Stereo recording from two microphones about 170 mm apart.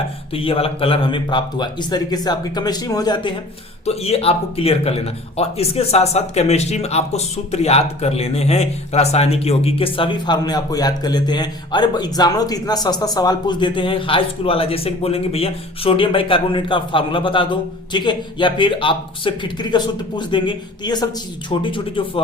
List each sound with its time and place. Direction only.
0.3 s speech: 35° left (ahead or behind)
3.8 s speech: 35° left (ahead or behind)